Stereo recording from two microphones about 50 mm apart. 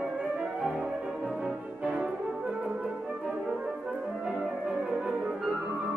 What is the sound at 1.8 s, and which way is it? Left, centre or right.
French horn, centre.